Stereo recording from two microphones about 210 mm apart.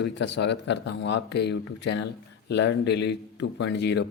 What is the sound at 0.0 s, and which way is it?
Speech, 55° left (ahead or behind).